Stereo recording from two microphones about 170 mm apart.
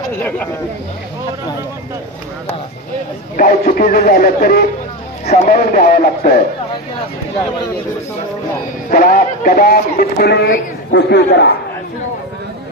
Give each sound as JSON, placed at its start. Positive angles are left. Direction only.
{"t": 3.3, "sound": "speech", "side_deg": 55}
{"t": 5.2, "sound": "speech", "side_deg": 45}
{"t": 5.6, "sound": "a man's voice", "side_deg": 60}
{"t": 8.9, "sound": "a man's voice", "side_deg": 55}